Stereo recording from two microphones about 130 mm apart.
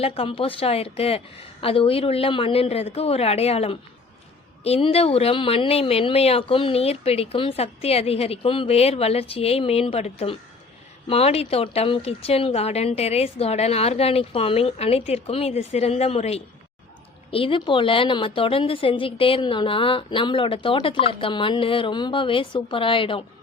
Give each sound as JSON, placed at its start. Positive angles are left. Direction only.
{"t": 0.0, "sound": "a woman's voice", "side_deg": 45}